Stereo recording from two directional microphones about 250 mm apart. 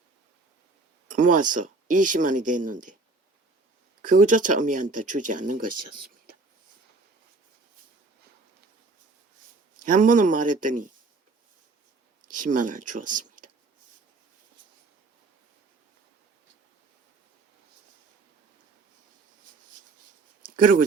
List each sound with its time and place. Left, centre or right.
1.0 s speech: right
4.0 s speech: right
9.8 s speech: right
12.3 s speech: right
20.6 s speech: right